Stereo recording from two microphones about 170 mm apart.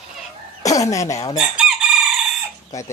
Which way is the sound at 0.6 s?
20° left (ahead or behind).